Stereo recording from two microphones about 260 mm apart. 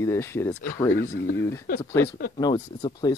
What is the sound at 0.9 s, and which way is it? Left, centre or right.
Speech, left.